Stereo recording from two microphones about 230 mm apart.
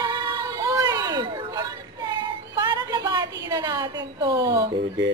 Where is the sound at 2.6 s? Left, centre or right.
Centre.